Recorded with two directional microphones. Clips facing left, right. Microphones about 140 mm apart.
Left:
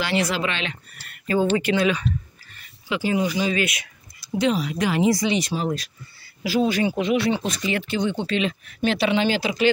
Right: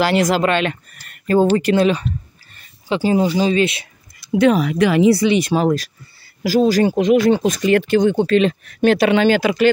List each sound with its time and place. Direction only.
0.0 s speech: 40° right (ahead or behind)
4.3 s speech: 55° right (ahead or behind)
6.4 s speech: 40° right (ahead or behind); by 9.7 s 55° right (ahead or behind)